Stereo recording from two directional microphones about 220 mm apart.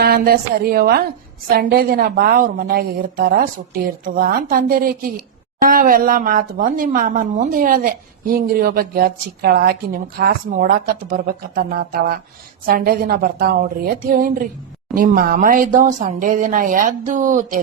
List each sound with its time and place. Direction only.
0.0 s a woman's voice: 45° right (ahead or behind)